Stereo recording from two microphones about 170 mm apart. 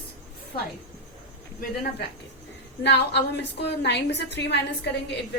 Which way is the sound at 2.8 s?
80° left.